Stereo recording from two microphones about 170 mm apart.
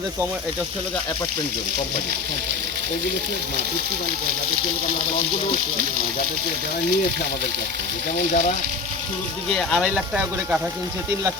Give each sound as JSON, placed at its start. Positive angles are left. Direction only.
{"t": 8.3, "sound": "speech", "side_deg": 45}
{"t": 9.5, "sound": "speech", "side_deg": 0}